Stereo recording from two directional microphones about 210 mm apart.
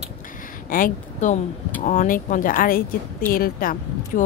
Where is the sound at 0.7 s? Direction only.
40° left (ahead or behind).